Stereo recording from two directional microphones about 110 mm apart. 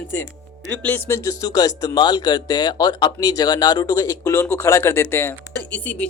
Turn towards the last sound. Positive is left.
turn(degrees=20)  # may be behind; listen again after turning